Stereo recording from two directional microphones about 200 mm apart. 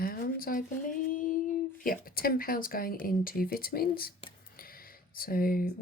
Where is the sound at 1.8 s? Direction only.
45° left (ahead or behind).